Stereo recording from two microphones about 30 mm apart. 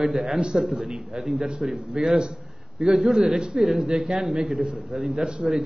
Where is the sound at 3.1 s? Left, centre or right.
Centre.